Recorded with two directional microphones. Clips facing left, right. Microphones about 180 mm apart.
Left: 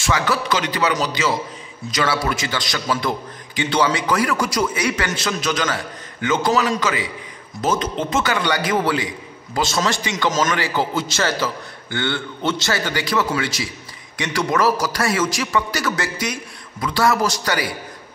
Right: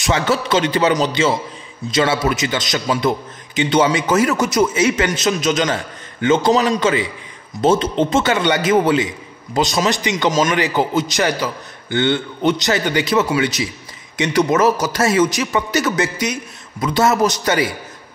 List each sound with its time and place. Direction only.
0.0 s a man's voice: 25° right (ahead or behind)